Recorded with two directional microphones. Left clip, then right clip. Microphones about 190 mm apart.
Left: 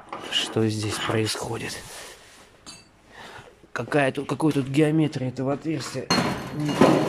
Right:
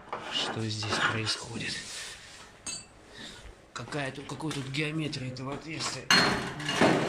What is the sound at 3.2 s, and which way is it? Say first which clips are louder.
Speech: left 5 dB; 45° left (ahead or behind).